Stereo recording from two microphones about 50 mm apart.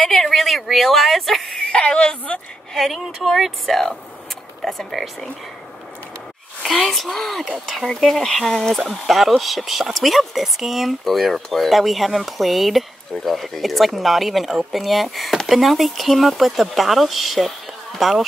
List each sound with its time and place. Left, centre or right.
0.0 s speech: centre
1.6 s a woman's voice: left
2.7 s speech: centre
6.6 s speech: centre